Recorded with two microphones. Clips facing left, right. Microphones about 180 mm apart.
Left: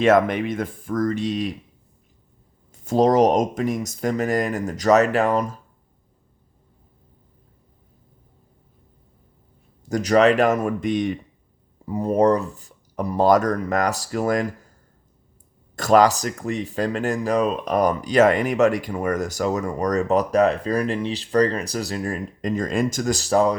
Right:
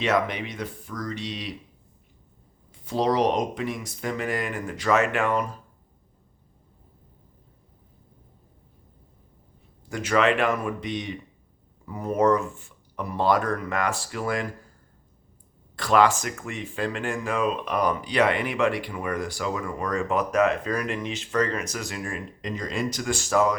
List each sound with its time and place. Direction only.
0.0 s speech: 50° left (ahead or behind)
2.7 s speech: 45° left (ahead or behind)
9.9 s speech: 40° left (ahead or behind)
11.9 s speech: 30° left (ahead or behind)
15.7 s speech: 45° left (ahead or behind)